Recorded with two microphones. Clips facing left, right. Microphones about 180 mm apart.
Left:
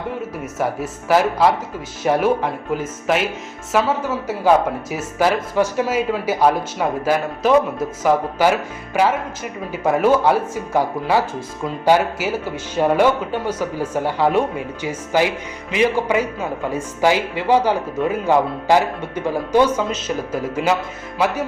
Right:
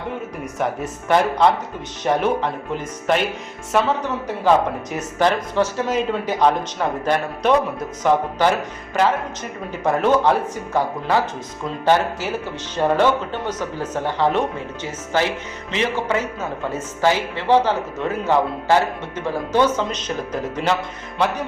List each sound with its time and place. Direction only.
0.6 s speech: 5° left (ahead or behind)